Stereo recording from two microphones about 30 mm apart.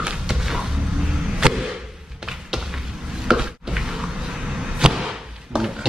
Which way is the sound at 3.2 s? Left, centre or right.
Right.